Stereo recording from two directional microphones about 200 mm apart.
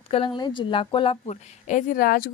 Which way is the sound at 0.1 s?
25° left (ahead or behind).